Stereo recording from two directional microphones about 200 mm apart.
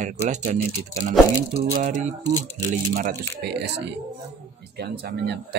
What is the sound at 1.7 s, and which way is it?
Speech, 40° right (ahead or behind).